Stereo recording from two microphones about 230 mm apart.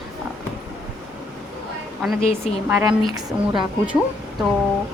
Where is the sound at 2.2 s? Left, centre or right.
Left.